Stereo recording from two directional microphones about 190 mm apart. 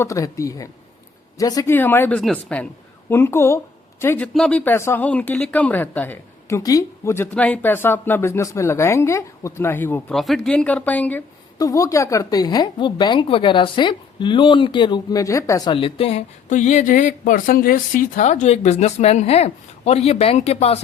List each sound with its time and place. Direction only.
0.0 s a woman's voice: 15° left (ahead or behind); by 20.7 s 30° left (ahead or behind)